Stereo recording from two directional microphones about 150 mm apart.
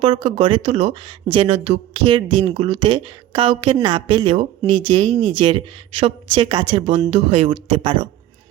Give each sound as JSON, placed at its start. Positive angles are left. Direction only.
{"t": 0.0, "sound": "speech", "side_deg": -40}